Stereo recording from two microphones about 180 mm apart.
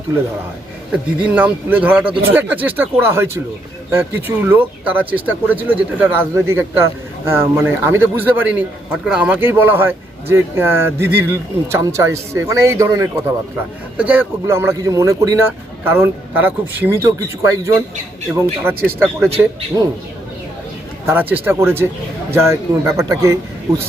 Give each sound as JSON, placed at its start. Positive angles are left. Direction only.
{"t": 0.9, "sound": "speech", "side_deg": -5}
{"t": 18.3, "sound": "speech", "side_deg": 0}
{"t": 18.9, "sound": "speech", "side_deg": -15}
{"t": 21.1, "sound": "speech", "side_deg": -10}